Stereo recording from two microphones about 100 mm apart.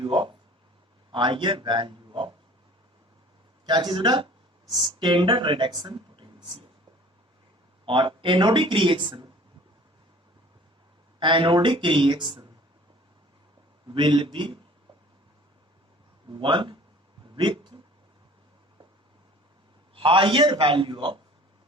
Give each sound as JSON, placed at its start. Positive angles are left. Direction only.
{"t": 0.0, "sound": "a sound", "side_deg": -55}
{"t": 1.1, "sound": "a man's voice", "side_deg": -55}
{"t": 3.7, "sound": "a man's voice", "side_deg": -50}
{"t": 7.9, "sound": "speech", "side_deg": -55}
{"t": 11.2, "sound": "speech", "side_deg": -55}
{"t": 13.8, "sound": "a man's voice", "side_deg": -55}
{"t": 16.3, "sound": "speech", "side_deg": -55}
{"t": 20.0, "sound": "speech", "side_deg": -55}